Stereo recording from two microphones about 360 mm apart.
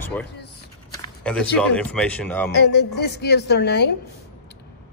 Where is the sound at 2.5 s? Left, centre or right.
Left.